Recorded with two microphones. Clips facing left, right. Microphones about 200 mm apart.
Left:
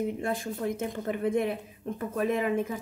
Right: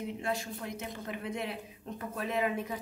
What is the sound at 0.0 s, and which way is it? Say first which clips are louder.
A woman's voice: left 5 dB; 50° left (ahead or behind).